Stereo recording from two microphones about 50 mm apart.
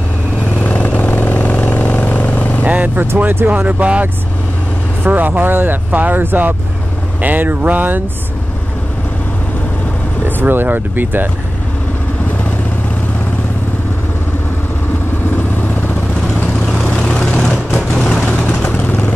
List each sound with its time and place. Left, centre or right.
0.6 s vehicle: left
2.6 s vehicle: right
3.4 s speech: right
10.2 s speech: right
16.6 s vehicle: centre
18.8 s vehicle: left